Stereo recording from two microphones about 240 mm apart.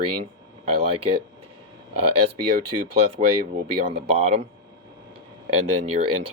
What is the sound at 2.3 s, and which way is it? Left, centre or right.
Speech, right.